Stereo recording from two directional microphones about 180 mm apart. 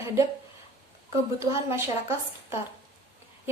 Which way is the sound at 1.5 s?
15° right (ahead or behind).